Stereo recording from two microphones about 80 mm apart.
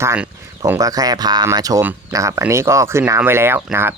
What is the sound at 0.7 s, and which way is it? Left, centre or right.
Speech, right.